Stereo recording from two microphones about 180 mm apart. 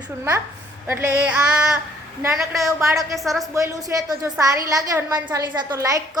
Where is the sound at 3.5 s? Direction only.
20° right (ahead or behind).